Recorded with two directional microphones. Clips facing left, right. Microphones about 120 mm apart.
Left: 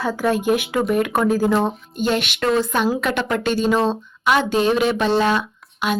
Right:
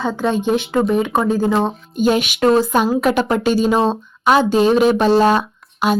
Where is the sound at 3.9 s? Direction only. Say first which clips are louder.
Right 4 dB; 35° right (ahead or behind).